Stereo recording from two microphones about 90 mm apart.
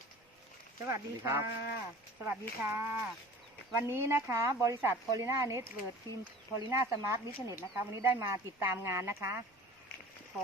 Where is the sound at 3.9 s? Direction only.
30° right (ahead or behind).